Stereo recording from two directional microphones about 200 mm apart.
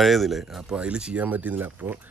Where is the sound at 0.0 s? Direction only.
Centre (ahead or behind).